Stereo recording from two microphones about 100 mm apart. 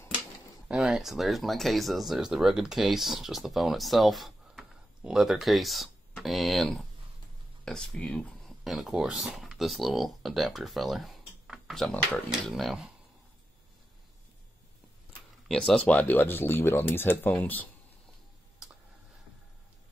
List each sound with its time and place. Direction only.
0.7 s speech: 5° right (ahead or behind)
8.6 s speech: centre (ahead or behind)
15.4 s speech: 5° left (ahead or behind)